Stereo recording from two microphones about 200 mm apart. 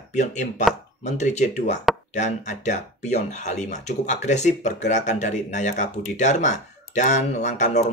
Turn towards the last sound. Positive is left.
turn(degrees=35)  # may be behind; listen again after turning